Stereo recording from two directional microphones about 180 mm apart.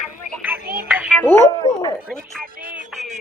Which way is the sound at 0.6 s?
55° right (ahead or behind).